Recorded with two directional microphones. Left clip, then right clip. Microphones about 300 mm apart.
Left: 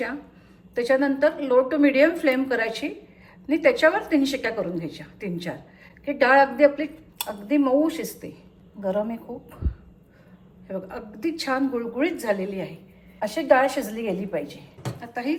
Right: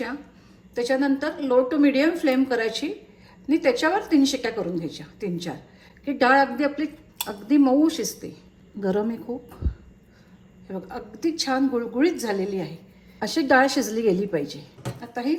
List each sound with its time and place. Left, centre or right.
0.8 s speech: centre
8.8 s a woman's voice: right
10.7 s a woman's voice: centre
14.8 s a sound: centre